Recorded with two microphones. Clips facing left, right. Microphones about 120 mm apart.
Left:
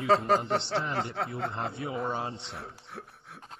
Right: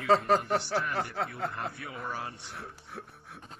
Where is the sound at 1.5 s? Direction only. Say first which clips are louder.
Left 4 dB; 25° left (ahead or behind).